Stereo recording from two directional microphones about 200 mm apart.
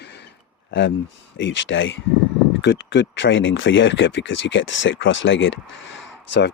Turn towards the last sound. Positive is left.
turn(degrees=65)  # may be behind; listen again after turning